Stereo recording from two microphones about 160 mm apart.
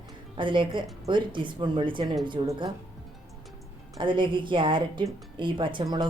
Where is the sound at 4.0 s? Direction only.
30° right (ahead or behind).